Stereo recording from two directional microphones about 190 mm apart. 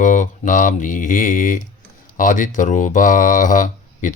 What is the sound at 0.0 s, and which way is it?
Speech, 40° left (ahead or behind).